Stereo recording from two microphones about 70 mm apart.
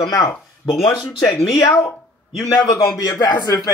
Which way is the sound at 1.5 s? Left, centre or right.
Left.